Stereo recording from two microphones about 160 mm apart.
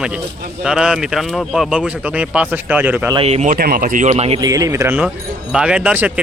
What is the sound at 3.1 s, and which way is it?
Speech, 35° right (ahead or behind).